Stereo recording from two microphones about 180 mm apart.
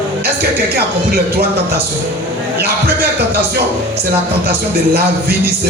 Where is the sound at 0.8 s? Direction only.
60° right (ahead or behind).